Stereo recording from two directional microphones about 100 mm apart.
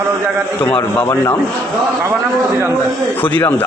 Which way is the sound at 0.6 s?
20° left (ahead or behind).